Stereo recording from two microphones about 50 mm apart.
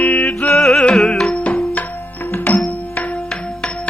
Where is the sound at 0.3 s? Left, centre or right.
Centre.